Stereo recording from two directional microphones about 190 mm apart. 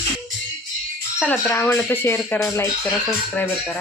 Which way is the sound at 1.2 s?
10° left (ahead or behind).